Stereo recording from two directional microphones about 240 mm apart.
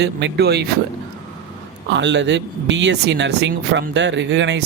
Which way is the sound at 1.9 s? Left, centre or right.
Right.